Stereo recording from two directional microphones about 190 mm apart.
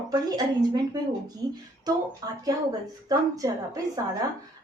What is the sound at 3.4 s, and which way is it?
Speech, 20° right (ahead or behind).